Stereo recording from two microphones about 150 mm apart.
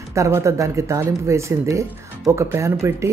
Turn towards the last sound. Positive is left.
turn(degrees=-20)  # may be behind; listen again after turning